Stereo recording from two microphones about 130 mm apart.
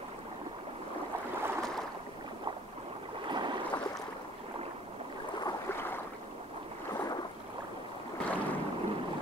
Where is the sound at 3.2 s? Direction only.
35° right (ahead or behind).